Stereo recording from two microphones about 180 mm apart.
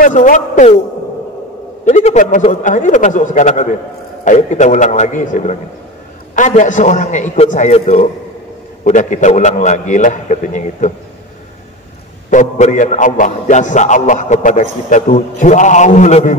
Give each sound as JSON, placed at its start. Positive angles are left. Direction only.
{"t": 0.0, "sound": "a man's voice", "side_deg": 45}
{"t": 1.9, "sound": "a man's voice", "side_deg": 40}
{"t": 12.3, "sound": "a man's voice", "side_deg": 40}